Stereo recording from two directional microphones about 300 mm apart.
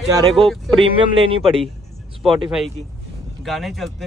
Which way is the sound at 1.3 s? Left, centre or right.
Centre.